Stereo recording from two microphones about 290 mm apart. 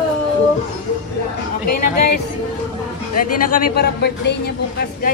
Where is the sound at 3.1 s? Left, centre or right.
Left.